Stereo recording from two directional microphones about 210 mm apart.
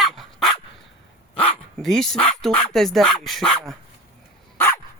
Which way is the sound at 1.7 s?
Centre (ahead or behind).